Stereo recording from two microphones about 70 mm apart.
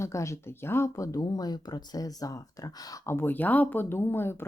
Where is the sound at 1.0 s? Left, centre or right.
Left.